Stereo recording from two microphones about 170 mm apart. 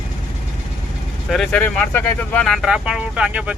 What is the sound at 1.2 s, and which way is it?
Speech, centre (ahead or behind).